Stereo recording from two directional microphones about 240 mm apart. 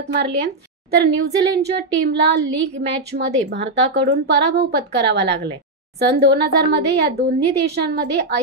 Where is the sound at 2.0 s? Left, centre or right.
Right.